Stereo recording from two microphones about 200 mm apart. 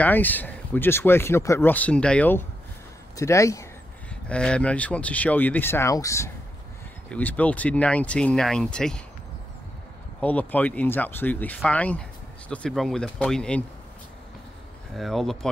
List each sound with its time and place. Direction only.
0.0 s speech: 10° left (ahead or behind)
10.2 s speech: 10° left (ahead or behind)
15.0 s speech: centre (ahead or behind)